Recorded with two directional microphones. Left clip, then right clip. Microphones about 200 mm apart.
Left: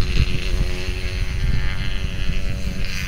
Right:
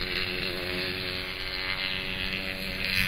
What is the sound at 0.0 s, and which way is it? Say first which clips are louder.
Vehicle: left 1 dB; 55° right (ahead or behind).